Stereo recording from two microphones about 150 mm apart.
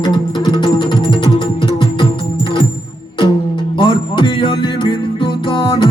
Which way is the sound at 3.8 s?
35° left (ahead or behind).